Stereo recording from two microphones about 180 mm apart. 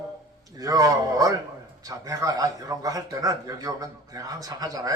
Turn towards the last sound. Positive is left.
turn(degrees=-20)  # may be behind; listen again after turning